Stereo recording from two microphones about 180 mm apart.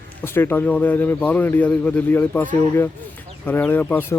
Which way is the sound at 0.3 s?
10° left (ahead or behind).